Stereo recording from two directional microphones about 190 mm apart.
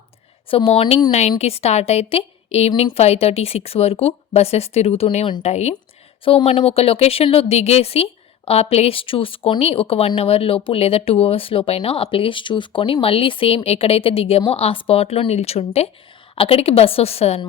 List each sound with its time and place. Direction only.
0.4 s a woman's voice: 30° left (ahead or behind)